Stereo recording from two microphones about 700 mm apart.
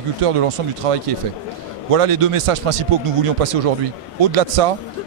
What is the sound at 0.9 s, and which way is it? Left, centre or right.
Speech, right.